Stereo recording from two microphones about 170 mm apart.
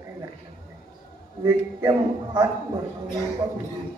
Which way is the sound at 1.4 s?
25° right (ahead or behind).